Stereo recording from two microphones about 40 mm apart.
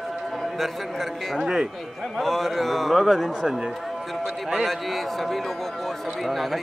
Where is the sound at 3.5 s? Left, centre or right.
Centre.